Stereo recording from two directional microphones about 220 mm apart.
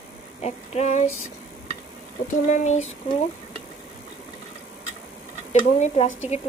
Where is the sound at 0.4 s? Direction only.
30° left (ahead or behind).